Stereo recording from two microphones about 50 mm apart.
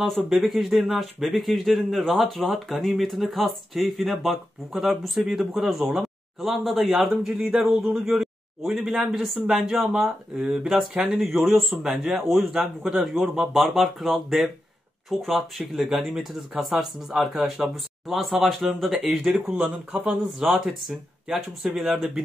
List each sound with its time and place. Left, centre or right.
0.0 s speech: centre
7.2 s a man's voice: centre
10.3 s speech: right
10.7 s speech: centre
18.9 s speech: centre